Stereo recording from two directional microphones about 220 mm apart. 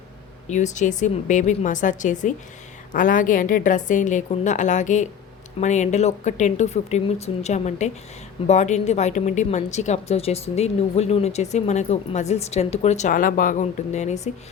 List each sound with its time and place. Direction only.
0.4 s a woman's voice: 30° left (ahead or behind)